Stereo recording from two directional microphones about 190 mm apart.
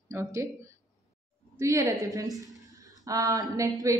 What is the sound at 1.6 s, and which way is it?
Speech, 15° right (ahead or behind).